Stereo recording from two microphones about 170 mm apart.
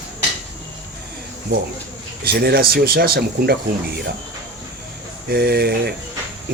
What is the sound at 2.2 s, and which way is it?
Speech, 65° right (ahead or behind).